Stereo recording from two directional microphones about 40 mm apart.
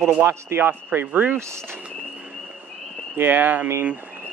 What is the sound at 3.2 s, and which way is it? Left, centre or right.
Speech, right.